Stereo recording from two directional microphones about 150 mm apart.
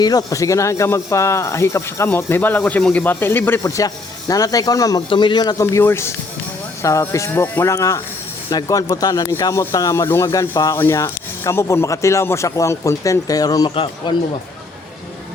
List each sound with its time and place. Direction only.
0.0 s speech: 25° left (ahead or behind)
13.7 s a man's voice: 35° left (ahead or behind)